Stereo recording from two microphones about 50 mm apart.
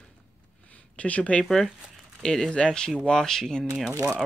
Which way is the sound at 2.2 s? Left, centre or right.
Centre.